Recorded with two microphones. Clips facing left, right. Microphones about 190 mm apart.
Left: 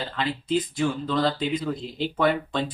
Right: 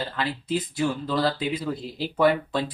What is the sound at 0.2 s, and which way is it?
Speech, 5° right (ahead or behind).